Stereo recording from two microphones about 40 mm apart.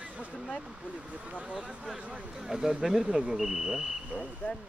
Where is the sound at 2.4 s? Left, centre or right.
Centre.